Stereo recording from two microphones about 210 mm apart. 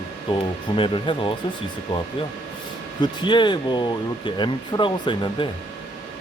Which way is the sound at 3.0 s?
20° left (ahead or behind).